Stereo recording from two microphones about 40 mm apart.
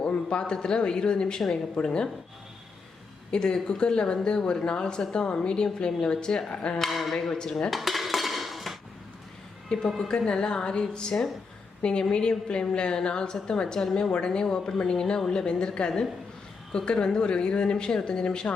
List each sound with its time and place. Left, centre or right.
0.0 s a woman's voice: left
3.3 s a woman's voice: centre
6.9 s speech: centre
7.3 s a woman's voice: centre
7.7 s cutlery: centre
10.0 s a woman's voice: centre